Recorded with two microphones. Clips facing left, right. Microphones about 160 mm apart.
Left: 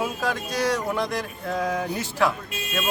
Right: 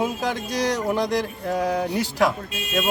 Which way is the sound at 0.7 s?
15° right (ahead or behind).